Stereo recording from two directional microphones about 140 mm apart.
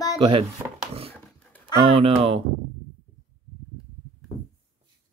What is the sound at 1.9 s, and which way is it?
Speech, 45° right (ahead or behind).